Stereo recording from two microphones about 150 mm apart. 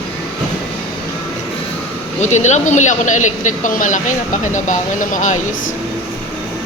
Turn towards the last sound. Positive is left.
turn(degrees=55)  # may be behind; listen again after turning